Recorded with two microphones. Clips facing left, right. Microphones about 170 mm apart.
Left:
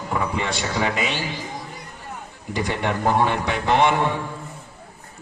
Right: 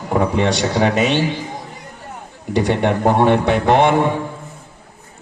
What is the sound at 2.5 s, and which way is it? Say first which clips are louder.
A man's voice: right 8 dB; 65° right (ahead or behind).